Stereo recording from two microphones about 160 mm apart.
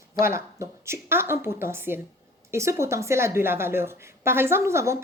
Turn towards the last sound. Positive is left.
turn(degrees=-15)  # may be behind; listen again after turning